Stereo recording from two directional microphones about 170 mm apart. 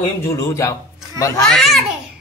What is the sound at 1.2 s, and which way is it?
Speech, 20° left (ahead or behind).